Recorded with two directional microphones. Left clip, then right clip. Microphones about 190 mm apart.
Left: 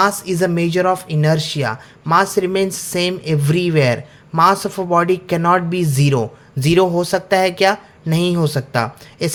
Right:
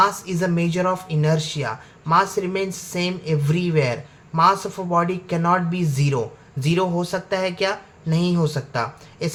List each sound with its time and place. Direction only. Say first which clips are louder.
0.0 s speech: left 3 dB; 40° left (ahead or behind)